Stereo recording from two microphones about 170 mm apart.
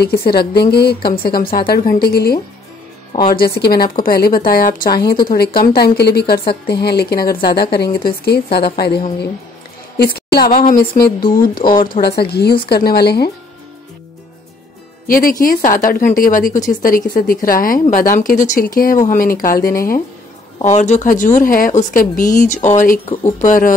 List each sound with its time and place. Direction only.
0.0 s speech: 65° left (ahead or behind)
12.0 s speech: 70° left (ahead or behind)
15.0 s speech: 55° left (ahead or behind)
20.6 s speech: 45° left (ahead or behind)